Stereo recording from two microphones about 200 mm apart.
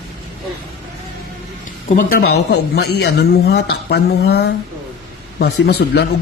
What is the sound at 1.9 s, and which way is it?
Speech, 45° left (ahead or behind).